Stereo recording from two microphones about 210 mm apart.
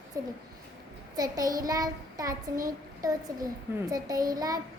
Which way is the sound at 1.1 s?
15° right (ahead or behind).